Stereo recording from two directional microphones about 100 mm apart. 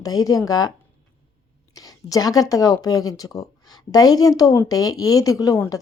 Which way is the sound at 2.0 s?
35° left (ahead or behind).